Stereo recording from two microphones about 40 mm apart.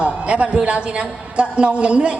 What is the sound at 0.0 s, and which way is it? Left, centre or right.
Speech, right.